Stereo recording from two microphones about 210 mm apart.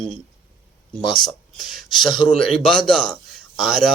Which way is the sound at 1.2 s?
Centre (ahead or behind).